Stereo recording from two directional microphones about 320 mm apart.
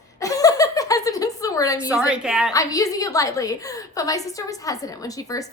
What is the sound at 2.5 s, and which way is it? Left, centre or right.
A woman's voice, centre.